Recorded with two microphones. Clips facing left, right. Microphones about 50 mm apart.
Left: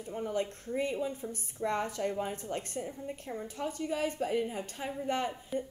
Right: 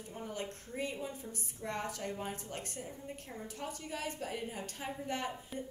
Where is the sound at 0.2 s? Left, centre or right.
Left.